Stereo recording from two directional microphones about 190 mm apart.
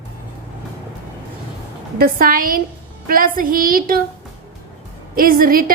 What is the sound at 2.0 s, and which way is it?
A woman's voice, 50° right (ahead or behind).